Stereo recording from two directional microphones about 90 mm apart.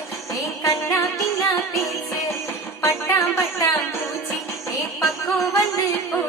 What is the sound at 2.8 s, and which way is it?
Music, 30° left (ahead or behind).